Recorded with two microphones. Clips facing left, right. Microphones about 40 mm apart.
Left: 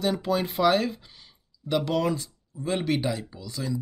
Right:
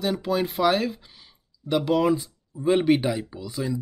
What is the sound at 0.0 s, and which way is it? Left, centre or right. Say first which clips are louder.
Speech: right 1 dB; centre.